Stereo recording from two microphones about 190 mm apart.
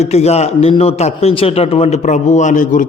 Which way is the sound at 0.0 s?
35° left (ahead or behind).